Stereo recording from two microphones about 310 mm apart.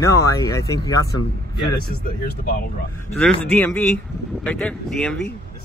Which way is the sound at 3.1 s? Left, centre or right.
Centre.